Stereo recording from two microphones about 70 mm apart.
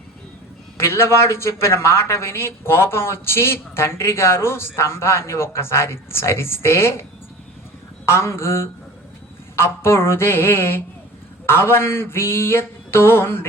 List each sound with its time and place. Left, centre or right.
0.8 s a man's voice: left
8.0 s a man's voice: left